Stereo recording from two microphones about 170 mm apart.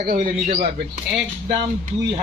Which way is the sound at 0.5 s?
65° right (ahead or behind).